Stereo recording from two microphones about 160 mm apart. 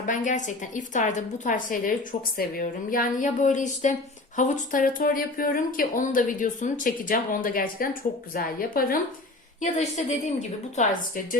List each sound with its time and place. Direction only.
0.0 s a woman's voice: 50° left (ahead or behind)
9.6 s a woman's voice: 45° left (ahead or behind)
10.8 s speech: 60° left (ahead or behind)